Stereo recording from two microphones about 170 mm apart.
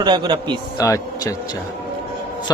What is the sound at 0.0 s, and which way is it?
Speech, 25° right (ahead or behind).